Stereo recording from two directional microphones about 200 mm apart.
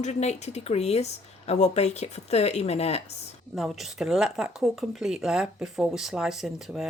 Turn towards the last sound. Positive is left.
turn(degrees=0)  # may be behind; listen again after turning